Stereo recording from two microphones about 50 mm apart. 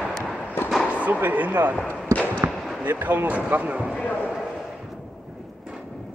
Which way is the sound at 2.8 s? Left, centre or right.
Right.